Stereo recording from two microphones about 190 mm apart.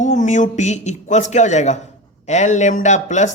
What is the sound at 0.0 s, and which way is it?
A man's voice, 40° left (ahead or behind).